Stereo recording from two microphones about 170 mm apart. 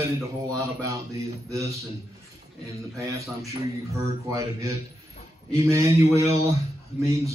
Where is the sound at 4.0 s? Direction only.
20° right (ahead or behind).